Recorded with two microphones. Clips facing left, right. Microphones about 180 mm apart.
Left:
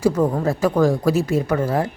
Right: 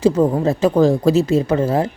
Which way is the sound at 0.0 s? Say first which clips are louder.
Right 3 dB; 20° right (ahead or behind).